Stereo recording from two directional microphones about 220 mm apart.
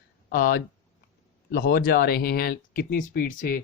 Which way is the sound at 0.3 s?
40° left (ahead or behind).